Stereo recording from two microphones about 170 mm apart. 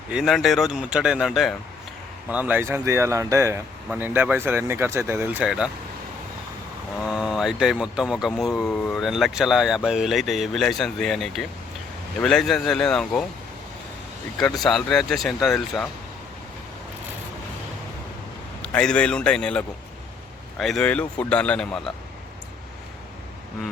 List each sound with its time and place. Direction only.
0.1 s speech: centre (ahead or behind)
7.0 s speech: 5° right (ahead or behind)
14.3 s speech: centre (ahead or behind)
18.6 s speech: 5° left (ahead or behind)